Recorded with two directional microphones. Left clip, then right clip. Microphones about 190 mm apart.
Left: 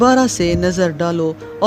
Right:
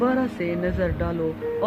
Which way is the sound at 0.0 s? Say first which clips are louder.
Left 10 dB; 55° left (ahead or behind).